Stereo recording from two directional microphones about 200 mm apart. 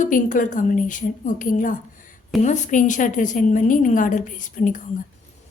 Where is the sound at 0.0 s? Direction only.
40° left (ahead or behind).